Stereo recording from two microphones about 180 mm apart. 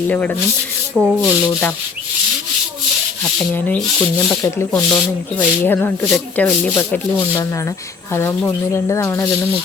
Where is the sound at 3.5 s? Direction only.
10° left (ahead or behind).